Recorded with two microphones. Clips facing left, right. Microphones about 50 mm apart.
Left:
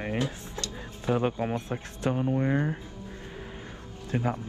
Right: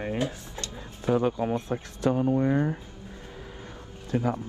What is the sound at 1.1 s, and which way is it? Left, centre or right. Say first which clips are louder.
Speech: right 2 dB; left.